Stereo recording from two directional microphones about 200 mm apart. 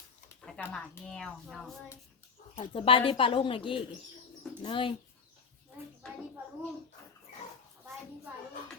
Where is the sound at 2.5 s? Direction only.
25° left (ahead or behind).